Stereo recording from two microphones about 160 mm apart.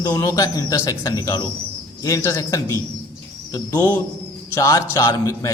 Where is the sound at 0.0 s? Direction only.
25° left (ahead or behind).